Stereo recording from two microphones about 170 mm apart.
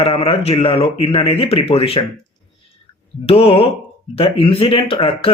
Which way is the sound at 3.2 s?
35° left (ahead or behind).